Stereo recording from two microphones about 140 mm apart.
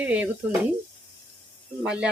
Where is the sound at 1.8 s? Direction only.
5° right (ahead or behind).